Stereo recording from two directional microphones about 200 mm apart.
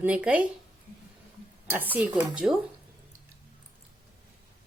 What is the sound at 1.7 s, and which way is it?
Speech, 10° right (ahead or behind).